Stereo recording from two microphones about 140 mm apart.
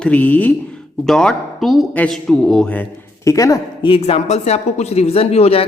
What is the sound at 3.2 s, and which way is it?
Speech, 25° left (ahead or behind).